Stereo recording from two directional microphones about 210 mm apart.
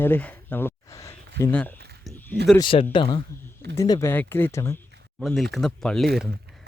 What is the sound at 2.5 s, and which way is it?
Speech, 25° left (ahead or behind).